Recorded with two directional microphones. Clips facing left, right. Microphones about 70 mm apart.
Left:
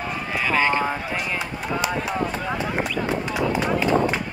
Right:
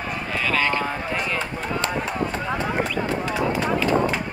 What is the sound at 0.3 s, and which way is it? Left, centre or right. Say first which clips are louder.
Run: left 2 dB; centre.